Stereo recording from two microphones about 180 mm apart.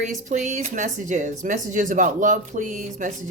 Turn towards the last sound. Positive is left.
turn(degrees=-45)  # may be behind; listen again after turning